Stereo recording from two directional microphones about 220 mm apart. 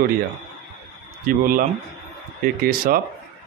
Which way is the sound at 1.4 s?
40° right (ahead or behind).